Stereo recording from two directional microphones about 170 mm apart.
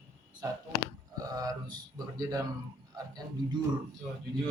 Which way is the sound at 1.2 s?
20° right (ahead or behind).